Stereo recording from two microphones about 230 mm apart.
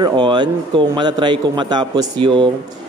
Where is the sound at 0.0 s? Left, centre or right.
Centre.